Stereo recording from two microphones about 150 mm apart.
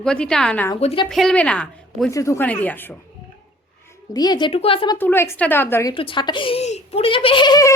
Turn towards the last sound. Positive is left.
turn(degrees=25)  # may be behind; listen again after turning